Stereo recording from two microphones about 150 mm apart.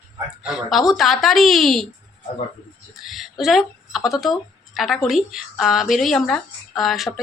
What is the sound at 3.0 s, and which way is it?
A woman's voice, centre (ahead or behind).